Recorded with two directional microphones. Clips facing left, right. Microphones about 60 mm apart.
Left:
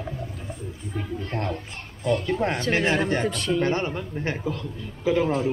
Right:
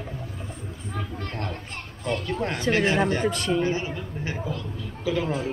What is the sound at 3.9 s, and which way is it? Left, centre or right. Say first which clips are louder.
A man's voice: left 3 dB; left.